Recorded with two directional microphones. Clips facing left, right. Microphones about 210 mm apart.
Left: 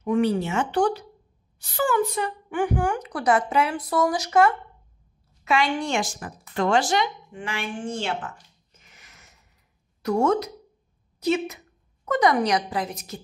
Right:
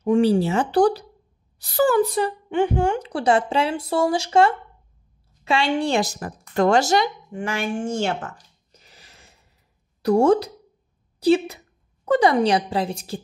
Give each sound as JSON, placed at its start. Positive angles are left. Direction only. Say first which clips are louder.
{"t": 0.0, "sound": "a woman's voice", "louder": "right 4 dB", "side_deg": -30}
{"t": 8.7, "sound": "a sound", "louder": "right 4 dB", "side_deg": -35}
{"t": 10.0, "sound": "a woman's voice", "louder": "right 5 dB", "side_deg": -30}